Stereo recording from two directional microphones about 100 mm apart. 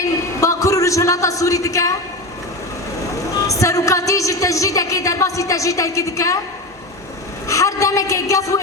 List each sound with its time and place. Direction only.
0.0 s a sound: 30° left (ahead or behind)
3.4 s a woman's voice: 30° left (ahead or behind)
7.4 s a woman's voice: 30° left (ahead or behind)